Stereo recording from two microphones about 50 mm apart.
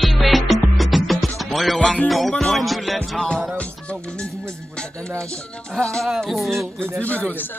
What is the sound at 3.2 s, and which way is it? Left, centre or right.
Music, centre.